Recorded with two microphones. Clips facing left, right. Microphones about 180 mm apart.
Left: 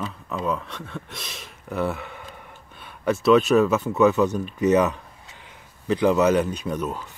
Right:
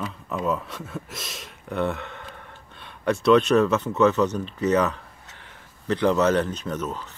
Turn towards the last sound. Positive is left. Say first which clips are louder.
# left 2 dB
turn(degrees=10)  # may be behind; listen again after turning